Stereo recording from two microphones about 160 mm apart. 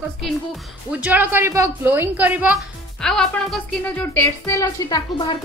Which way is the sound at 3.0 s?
5° left (ahead or behind).